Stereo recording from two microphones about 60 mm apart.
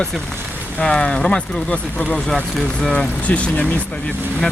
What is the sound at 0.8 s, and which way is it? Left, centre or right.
Speech, centre.